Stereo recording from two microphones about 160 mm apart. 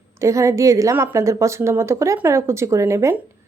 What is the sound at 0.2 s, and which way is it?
A woman's voice, 20° right (ahead or behind).